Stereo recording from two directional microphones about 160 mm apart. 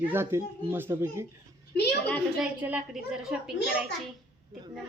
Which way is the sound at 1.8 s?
90° left.